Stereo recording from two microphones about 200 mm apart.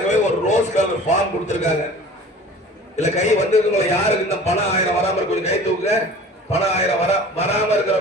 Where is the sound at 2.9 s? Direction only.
35° left (ahead or behind).